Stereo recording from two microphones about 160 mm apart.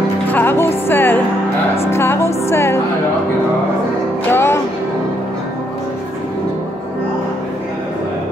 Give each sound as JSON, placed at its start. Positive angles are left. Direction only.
{"t": 0.3, "sound": "speech", "side_deg": 10}
{"t": 1.9, "sound": "music", "side_deg": 15}
{"t": 4.3, "sound": "music", "side_deg": 15}